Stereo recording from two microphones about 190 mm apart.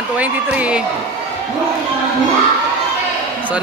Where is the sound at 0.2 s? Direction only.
5° right (ahead or behind).